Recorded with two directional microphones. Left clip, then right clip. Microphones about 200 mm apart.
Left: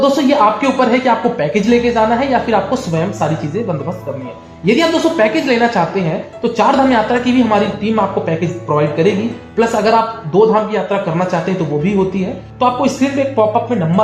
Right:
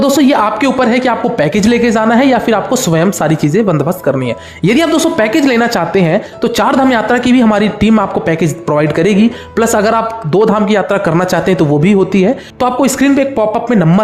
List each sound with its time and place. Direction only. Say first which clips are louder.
0.0 s a woman's voice: right 1 dB; 40° right (ahead or behind)
4.6 s a woman's voice: right 2 dB; 40° right (ahead or behind)
9.6 s a woman's voice: right 1 dB; 40° right (ahead or behind)